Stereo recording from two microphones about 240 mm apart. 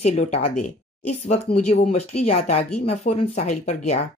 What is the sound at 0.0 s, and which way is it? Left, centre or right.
Speech, left.